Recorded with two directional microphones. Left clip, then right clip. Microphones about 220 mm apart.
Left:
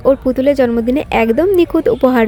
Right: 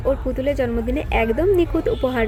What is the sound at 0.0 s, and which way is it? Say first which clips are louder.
A woman's voice: left 9 dB; 50° left (ahead or behind).